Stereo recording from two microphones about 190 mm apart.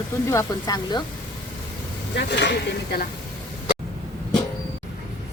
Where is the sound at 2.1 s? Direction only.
65° left (ahead or behind).